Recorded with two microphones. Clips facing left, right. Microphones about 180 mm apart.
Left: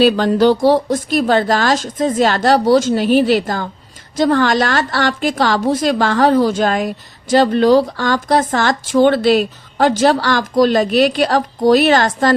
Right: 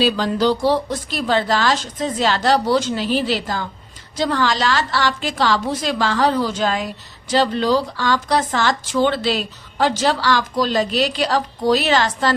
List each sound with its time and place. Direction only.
0.0 s a woman's voice: 55° left (ahead or behind)